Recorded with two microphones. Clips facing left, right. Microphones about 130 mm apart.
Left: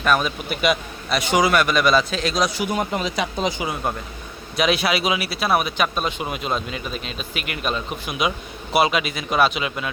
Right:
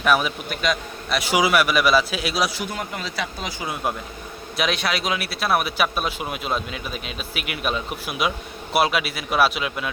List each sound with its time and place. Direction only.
0.0 s a man's voice: 5° right (ahead or behind)
0.5 s a man's voice: 10° left (ahead or behind)
1.1 s speech: 5° right (ahead or behind)
2.6 s speech: 20° left (ahead or behind)
4.5 s speech: centre (ahead or behind)